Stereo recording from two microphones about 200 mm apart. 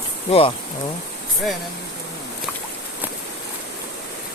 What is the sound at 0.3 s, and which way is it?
Speech, 30° left (ahead or behind).